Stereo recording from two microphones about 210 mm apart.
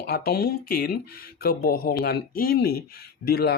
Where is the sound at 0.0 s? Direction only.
45° left (ahead or behind).